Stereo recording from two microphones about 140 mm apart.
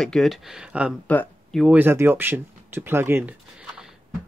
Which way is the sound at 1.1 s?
10° left (ahead or behind).